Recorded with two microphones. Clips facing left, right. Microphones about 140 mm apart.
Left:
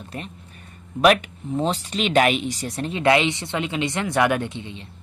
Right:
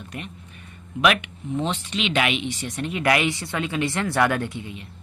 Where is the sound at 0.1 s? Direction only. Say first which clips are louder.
Left 2 dB; 35° left (ahead or behind).